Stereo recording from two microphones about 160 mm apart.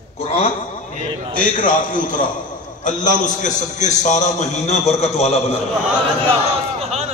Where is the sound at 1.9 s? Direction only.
55° left (ahead or behind).